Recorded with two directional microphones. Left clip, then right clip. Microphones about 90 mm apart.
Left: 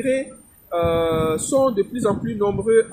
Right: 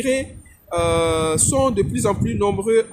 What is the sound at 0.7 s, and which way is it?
Speech, 65° right (ahead or behind).